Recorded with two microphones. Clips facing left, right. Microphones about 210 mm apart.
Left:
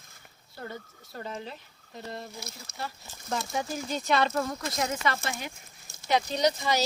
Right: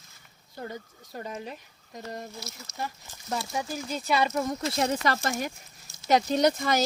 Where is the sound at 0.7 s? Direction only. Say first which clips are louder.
Right 2 dB; 15° right (ahead or behind).